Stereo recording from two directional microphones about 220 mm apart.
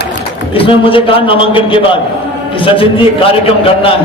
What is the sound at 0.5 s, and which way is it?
A man's voice, 25° left (ahead or behind).